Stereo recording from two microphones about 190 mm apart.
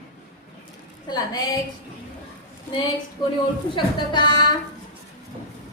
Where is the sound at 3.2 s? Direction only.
25° left (ahead or behind).